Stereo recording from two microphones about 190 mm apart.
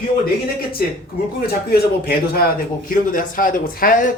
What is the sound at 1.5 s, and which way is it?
Speech, 55° left (ahead or behind).